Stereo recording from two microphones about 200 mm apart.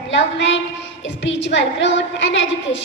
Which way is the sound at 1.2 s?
65° left (ahead or behind).